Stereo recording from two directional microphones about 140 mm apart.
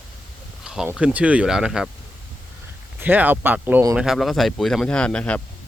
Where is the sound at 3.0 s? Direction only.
15° right (ahead or behind).